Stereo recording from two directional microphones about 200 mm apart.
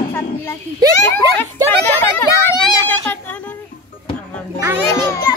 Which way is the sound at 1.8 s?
10° left (ahead or behind).